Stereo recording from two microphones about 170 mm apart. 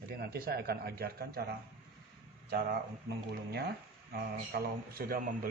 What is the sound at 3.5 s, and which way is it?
Speech, 70° right (ahead or behind).